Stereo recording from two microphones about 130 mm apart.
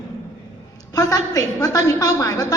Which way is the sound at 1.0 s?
30° left (ahead or behind).